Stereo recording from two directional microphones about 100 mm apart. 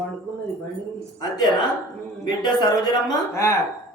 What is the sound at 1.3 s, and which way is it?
Speech, 45° left (ahead or behind).